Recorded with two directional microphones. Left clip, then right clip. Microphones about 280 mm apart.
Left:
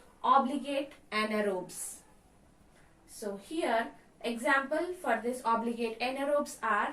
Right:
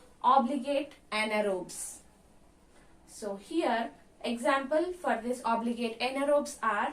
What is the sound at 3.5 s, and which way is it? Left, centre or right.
A woman's voice, centre.